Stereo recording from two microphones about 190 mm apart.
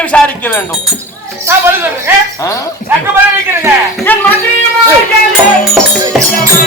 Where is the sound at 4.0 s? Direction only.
10° left (ahead or behind).